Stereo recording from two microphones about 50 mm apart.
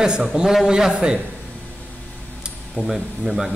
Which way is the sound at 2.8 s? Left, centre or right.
Centre.